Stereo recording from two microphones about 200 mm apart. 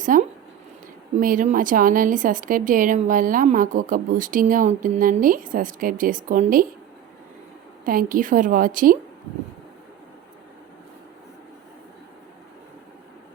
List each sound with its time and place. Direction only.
0.1 s speech: 40° right (ahead or behind)
7.9 s speech: 45° right (ahead or behind)